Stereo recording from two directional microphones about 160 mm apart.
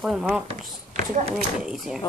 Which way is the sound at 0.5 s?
50° right (ahead or behind).